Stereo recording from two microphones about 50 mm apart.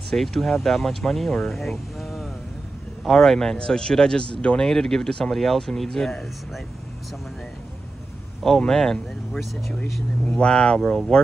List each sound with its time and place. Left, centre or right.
0.1 s speech: centre; by 4.6 s left
4.6 s speech: centre
8.5 s speech: centre
10.2 s speech: centre